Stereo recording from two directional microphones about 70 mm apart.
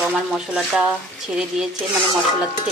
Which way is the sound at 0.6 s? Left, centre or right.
Centre.